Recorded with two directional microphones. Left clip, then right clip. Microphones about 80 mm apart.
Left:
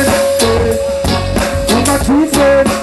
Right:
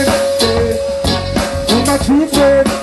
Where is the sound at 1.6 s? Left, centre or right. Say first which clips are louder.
Even; right.